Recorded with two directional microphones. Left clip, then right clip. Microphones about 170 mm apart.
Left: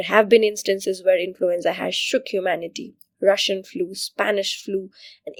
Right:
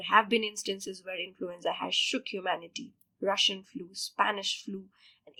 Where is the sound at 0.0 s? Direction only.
45° left (ahead or behind).